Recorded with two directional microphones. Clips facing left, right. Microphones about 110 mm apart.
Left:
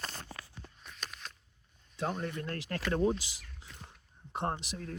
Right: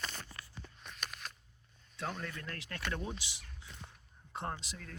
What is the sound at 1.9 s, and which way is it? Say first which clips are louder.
Speech: left 6 dB; 25° left (ahead or behind).